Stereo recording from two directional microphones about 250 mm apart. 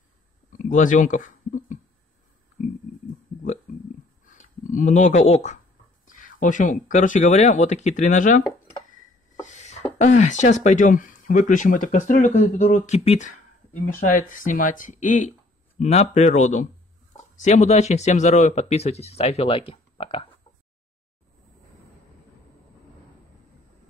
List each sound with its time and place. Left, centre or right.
0.7 s speech: left
4.3 s speech: left
9.4 s a sound: left
9.9 s speech: left